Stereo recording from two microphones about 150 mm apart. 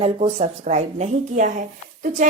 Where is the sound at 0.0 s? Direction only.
45° right (ahead or behind).